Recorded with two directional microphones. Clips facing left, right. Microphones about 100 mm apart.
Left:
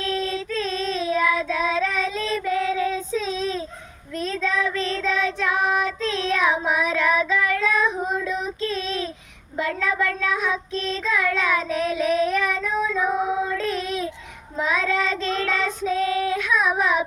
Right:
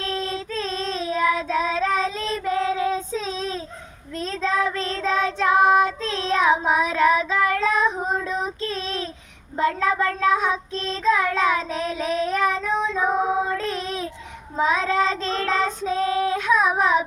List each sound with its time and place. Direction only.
0.0 s child singing: 35° right (ahead or behind)
13.1 s female singing: 40° right (ahead or behind)
14.5 s child singing: 30° right (ahead or behind)